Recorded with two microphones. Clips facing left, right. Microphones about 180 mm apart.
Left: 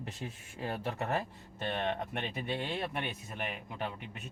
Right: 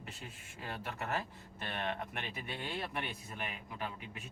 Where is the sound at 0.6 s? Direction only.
30° left (ahead or behind).